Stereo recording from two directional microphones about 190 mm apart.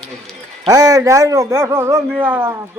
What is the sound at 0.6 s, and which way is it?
A man's voice, 20° right (ahead or behind).